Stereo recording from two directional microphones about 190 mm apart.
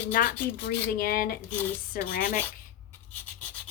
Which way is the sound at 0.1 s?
45° left (ahead or behind).